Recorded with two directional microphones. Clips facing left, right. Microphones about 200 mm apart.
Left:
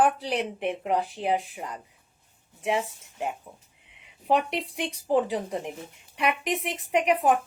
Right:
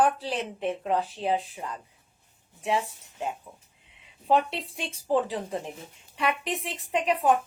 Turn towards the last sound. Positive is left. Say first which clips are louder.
# left 3 dB
turn(degrees=20)  # may be behind; listen again after turning